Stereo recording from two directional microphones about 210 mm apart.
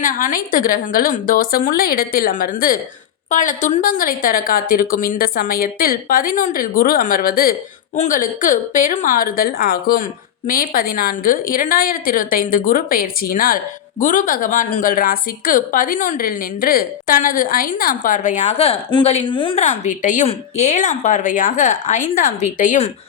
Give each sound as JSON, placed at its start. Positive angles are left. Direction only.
{"t": 0.0, "sound": "a woman's voice", "side_deg": 40}